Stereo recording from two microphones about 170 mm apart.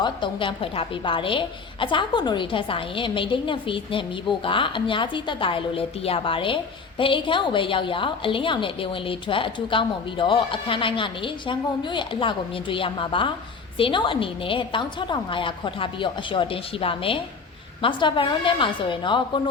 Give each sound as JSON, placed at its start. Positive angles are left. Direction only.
{"t": 0.0, "sound": "a woman's voice", "side_deg": 30}